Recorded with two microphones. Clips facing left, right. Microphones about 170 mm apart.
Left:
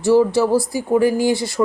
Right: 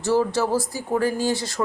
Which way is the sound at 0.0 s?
15° left (ahead or behind).